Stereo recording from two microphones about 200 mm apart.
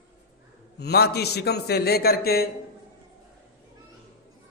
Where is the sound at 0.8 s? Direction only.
55° left (ahead or behind).